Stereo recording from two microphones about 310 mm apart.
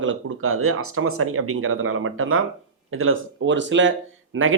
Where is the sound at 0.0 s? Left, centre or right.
Right.